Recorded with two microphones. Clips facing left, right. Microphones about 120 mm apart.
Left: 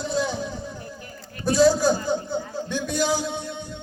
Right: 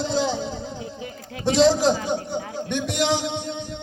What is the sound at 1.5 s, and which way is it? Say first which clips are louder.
Speech: even; 90° right.